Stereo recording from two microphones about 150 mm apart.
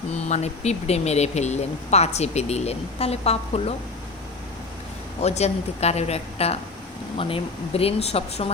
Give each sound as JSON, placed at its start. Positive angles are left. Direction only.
{"t": 0.1, "sound": "speech", "side_deg": 50}
{"t": 5.2, "sound": "speech", "side_deg": 45}